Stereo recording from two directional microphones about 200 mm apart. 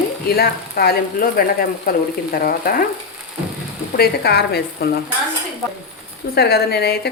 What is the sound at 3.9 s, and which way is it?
Speech, 50° left (ahead or behind).